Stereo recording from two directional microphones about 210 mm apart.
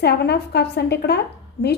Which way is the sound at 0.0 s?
50° left (ahead or behind).